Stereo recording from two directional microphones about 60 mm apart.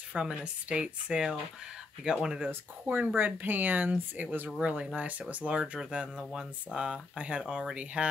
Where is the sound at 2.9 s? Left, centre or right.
Right.